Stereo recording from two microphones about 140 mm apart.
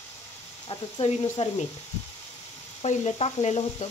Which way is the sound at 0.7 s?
45° left (ahead or behind).